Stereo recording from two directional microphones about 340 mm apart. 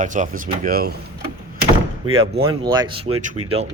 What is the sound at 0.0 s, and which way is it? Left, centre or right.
Speech, right.